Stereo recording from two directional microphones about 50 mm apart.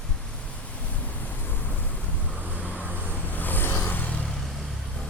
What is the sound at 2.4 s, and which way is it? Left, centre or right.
Vehicle, right.